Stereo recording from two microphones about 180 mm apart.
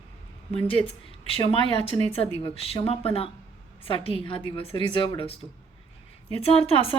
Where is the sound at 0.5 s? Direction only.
30° left (ahead or behind).